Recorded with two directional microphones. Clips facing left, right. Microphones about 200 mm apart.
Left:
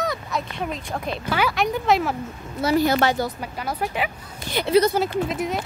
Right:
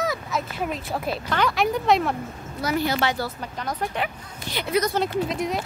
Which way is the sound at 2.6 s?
30° left (ahead or behind).